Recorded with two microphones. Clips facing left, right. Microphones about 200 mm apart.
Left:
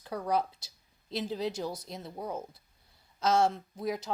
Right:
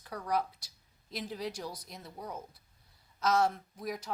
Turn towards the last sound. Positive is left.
turn(degrees=25)  # may be behind; listen again after turning